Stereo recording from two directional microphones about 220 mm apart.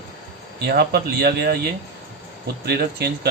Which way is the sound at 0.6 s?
45° right (ahead or behind).